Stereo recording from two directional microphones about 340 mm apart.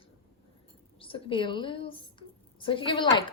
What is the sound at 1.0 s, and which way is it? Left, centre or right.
Speech, centre.